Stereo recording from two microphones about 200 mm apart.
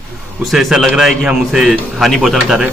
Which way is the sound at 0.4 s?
Centre (ahead or behind).